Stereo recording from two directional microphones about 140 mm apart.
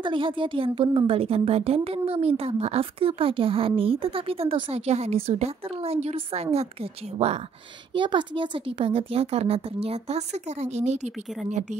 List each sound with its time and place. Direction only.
0.0 s a woman's voice: 35° right (ahead or behind)
7.9 s a woman's voice: 35° right (ahead or behind); by 11.8 s 55° right (ahead or behind)